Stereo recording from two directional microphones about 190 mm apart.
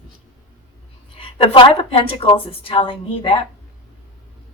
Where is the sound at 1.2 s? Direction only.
30° left (ahead or behind).